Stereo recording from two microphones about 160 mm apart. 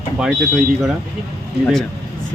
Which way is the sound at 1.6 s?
Centre (ahead or behind).